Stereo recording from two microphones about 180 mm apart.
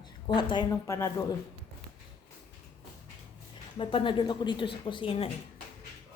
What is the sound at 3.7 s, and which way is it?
Speech, 25° left (ahead or behind).